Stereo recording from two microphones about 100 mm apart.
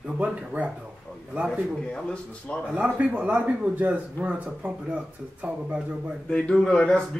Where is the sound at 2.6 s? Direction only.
15° right (ahead or behind).